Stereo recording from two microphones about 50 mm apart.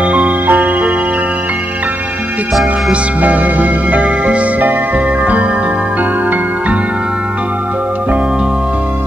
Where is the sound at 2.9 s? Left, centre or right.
Right.